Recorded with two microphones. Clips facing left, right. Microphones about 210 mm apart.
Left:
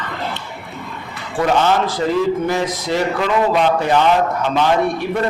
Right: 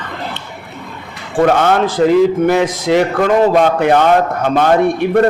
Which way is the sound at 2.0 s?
65° right (ahead or behind).